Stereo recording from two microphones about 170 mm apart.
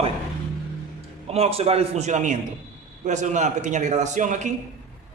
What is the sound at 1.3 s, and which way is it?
A man's voice, 35° right (ahead or behind).